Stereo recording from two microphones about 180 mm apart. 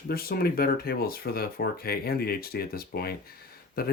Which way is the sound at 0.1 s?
55° left (ahead or behind).